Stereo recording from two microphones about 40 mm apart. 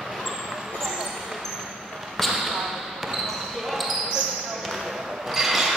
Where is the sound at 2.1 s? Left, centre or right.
Centre.